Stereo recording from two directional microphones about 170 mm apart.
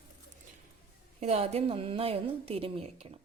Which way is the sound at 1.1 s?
35° right (ahead or behind).